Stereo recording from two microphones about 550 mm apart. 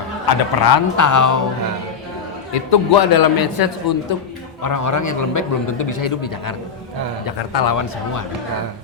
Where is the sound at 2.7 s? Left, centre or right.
Left.